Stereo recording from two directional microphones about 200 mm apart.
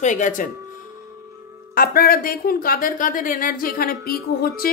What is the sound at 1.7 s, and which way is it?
Speech, 50° left (ahead or behind).